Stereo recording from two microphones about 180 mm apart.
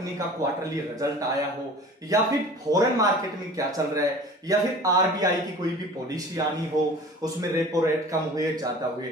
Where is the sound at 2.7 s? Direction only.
20° right (ahead or behind).